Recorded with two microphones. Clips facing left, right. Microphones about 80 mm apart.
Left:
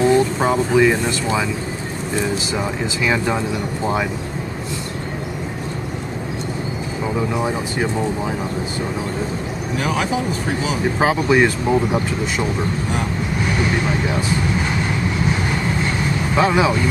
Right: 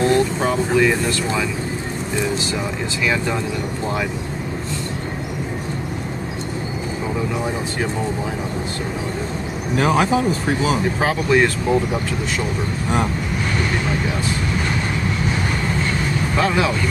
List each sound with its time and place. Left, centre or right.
0.0 s speech: centre
3.0 s speech: centre
9.8 s speech: right
11.0 s speech: centre
16.3 s speech: centre